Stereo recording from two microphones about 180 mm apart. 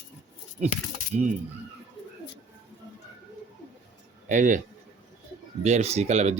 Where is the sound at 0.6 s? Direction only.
40° right (ahead or behind).